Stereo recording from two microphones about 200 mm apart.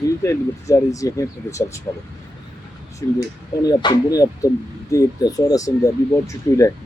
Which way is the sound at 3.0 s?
15° left (ahead or behind).